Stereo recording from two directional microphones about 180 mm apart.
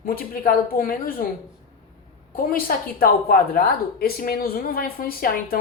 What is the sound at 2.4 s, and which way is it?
A woman's voice, 55° left (ahead or behind).